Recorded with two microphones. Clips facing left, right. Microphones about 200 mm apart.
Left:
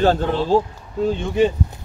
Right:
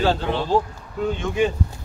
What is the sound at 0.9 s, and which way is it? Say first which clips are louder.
Speech: left 4 dB; 30° left (ahead or behind).